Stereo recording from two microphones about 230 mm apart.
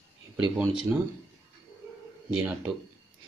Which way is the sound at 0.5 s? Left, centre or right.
Centre.